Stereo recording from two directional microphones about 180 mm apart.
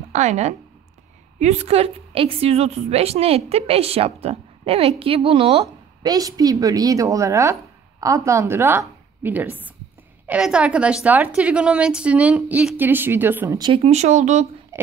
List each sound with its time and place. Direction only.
0.1 s a woman's voice: 40° right (ahead or behind); by 13.6 s 10° right (ahead or behind)
13.8 s a woman's voice: 40° right (ahead or behind)
14.7 s a sound: 15° right (ahead or behind)